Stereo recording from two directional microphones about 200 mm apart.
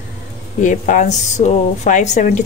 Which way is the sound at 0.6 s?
40° left (ahead or behind).